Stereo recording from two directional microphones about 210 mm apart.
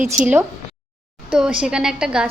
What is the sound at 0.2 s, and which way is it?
Speech, 35° right (ahead or behind).